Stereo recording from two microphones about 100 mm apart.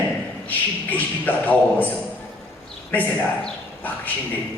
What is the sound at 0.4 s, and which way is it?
A man's voice, 15° left (ahead or behind).